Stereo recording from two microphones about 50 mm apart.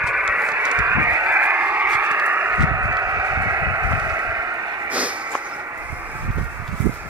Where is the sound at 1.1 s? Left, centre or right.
Right.